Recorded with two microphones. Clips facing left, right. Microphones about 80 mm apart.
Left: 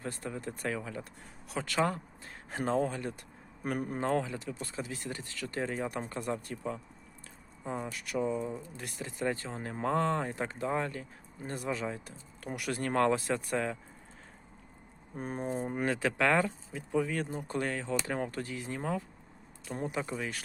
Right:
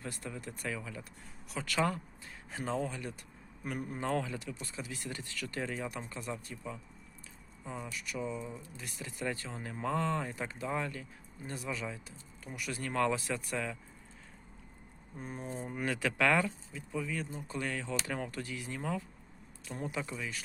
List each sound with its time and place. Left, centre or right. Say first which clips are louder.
0.0 s speech: left 4 dB; left
1.6 s speech: left 1 dB; left
2.3 s speech: left 5 dB; left
7.6 s speech: left 5 dB; left
12.4 s speech: left 5 dB; left
15.1 s speech: left 6 dB; left
16.7 s speech: left 8 dB; left